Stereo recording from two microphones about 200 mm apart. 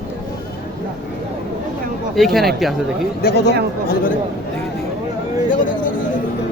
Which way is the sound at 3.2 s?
55° left (ahead or behind).